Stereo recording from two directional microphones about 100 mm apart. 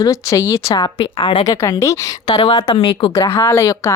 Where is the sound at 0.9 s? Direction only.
55° left (ahead or behind).